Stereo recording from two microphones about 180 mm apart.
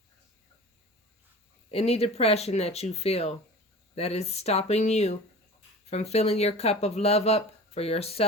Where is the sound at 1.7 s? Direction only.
35° left (ahead or behind).